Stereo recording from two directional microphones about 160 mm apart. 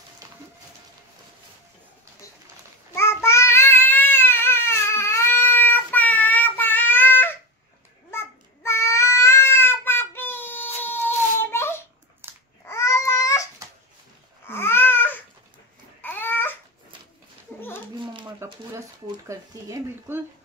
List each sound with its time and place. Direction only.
0.2 s a sound: 20° right (ahead or behind)
3.0 s child singing: 15° left (ahead or behind)
12.2 s babbling: 15° right (ahead or behind)
12.6 s babbling: 15° left (ahead or behind)
17.9 s a sound: 30° right (ahead or behind)
19.2 s speech: 20° right (ahead or behind)